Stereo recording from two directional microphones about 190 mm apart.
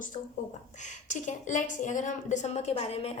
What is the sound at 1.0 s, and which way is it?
A woman's voice, 40° left (ahead or behind).